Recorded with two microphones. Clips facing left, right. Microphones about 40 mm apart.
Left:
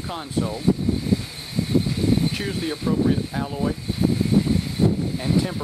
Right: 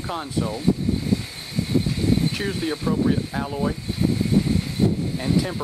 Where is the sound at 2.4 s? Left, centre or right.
Centre.